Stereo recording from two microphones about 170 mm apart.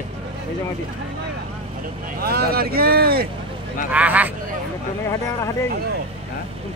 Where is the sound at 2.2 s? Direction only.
65° right (ahead or behind).